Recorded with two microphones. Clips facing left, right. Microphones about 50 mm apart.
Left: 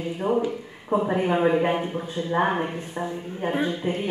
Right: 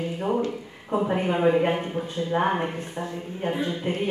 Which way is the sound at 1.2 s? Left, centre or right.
Centre.